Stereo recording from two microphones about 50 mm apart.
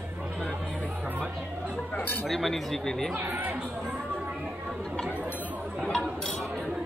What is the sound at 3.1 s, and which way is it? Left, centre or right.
Speech, right.